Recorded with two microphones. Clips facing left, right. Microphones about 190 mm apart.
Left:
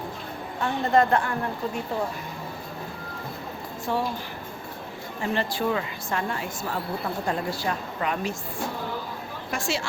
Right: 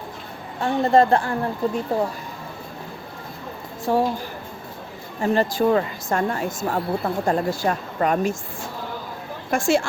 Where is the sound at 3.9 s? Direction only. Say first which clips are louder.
Right 7 dB; 40° right (ahead or behind).